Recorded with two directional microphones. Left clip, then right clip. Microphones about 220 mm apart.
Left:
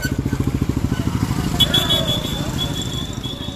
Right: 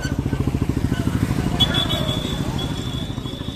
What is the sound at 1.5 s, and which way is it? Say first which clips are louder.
Vehicle: left 4 dB; 40° left (ahead or behind).